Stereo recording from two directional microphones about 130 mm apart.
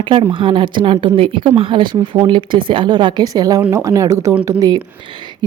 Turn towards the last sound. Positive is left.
turn(degrees=-30)  # may be behind; listen again after turning